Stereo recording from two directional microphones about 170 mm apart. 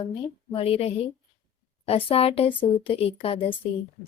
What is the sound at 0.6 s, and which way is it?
Speech, 35° left (ahead or behind).